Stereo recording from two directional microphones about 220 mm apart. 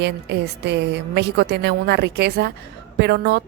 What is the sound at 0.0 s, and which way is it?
A woman's voice, 50° right (ahead or behind).